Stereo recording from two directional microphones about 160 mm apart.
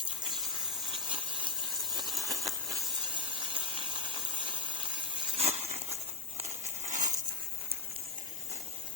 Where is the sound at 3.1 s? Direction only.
30° right (ahead or behind); by 7.1 s 50° right (ahead or behind).